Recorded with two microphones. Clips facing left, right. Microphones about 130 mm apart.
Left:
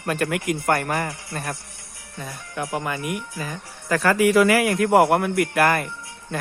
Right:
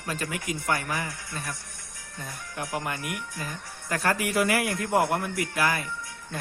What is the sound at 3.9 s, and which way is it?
A man's voice, 90° left.